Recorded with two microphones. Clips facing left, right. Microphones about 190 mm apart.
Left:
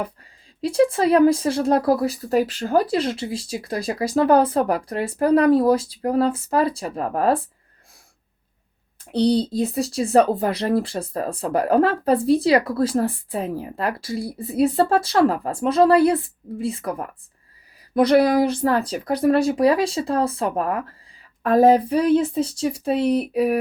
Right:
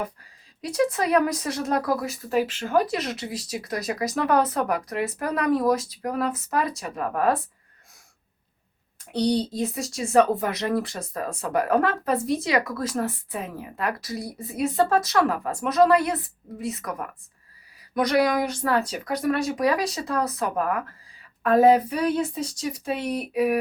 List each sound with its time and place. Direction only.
0.6 s speech: 30° left (ahead or behind)
9.2 s speech: 35° left (ahead or behind)